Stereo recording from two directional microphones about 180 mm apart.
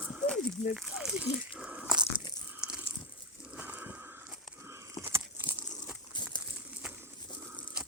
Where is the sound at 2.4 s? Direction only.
5° right (ahead or behind).